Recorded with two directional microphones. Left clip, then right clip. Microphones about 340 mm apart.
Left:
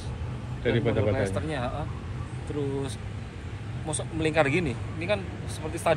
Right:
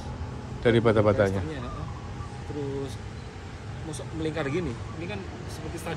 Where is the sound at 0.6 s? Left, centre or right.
Right.